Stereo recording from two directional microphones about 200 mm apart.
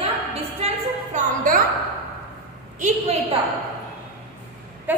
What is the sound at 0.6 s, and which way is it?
A woman's voice, 35° right (ahead or behind).